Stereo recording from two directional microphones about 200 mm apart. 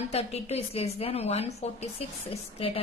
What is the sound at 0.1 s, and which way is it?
A woman's voice, 30° left (ahead or behind).